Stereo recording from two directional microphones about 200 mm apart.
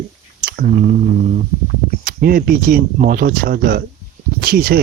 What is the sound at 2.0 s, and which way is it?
Speech, 45° right (ahead or behind).